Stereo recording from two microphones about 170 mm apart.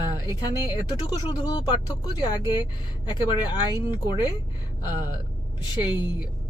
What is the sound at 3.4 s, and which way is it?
Speech, 25° left (ahead or behind).